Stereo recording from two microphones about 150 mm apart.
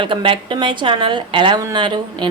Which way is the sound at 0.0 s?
35° right (ahead or behind).